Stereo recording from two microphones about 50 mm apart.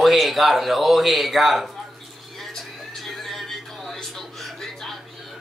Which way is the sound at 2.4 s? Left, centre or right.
Centre.